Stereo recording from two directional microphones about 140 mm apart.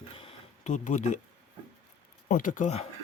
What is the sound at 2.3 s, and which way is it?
Speech, 70° left (ahead or behind).